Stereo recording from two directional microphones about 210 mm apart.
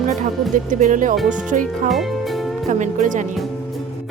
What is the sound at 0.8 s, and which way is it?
Music, 40° right (ahead or behind).